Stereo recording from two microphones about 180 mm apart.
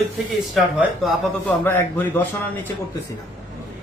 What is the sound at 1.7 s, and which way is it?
Speech, 10° left (ahead or behind).